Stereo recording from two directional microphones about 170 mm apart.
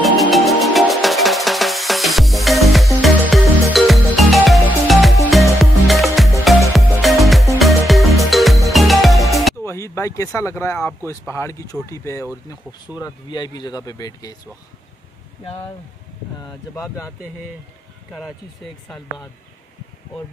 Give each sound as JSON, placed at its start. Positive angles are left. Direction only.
{"t": 0.0, "sound": "music", "side_deg": 0}
{"t": 9.7, "sound": "speech", "side_deg": 15}
{"t": 16.3, "sound": "speech", "side_deg": 20}